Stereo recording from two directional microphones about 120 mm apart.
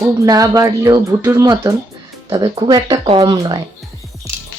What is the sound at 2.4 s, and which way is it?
Speech, 35° right (ahead or behind).